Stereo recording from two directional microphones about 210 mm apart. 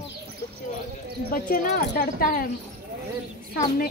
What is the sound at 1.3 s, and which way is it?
Speech, 45° left (ahead or behind).